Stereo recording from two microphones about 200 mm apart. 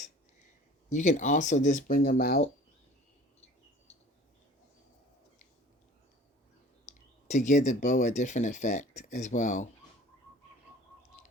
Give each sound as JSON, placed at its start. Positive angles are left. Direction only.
{"t": 0.9, "sound": "speech", "side_deg": 35}
{"t": 6.8, "sound": "speech", "side_deg": 35}